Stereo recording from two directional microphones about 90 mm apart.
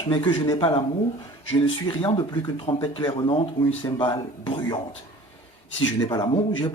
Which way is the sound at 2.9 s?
65° left (ahead or behind).